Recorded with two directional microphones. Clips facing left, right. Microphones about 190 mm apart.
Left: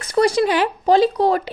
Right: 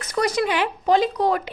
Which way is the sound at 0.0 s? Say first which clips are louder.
Left 6 dB; 30° left (ahead or behind).